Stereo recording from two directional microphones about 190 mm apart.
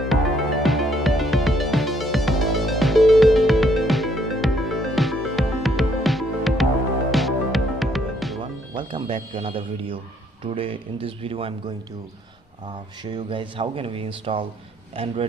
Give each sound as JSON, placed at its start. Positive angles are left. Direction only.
{"t": 0.1, "sound": "music", "side_deg": 0}
{"t": 8.7, "sound": "music", "side_deg": -25}
{"t": 9.3, "sound": "speech", "side_deg": -30}
{"t": 13.0, "sound": "speech", "side_deg": -25}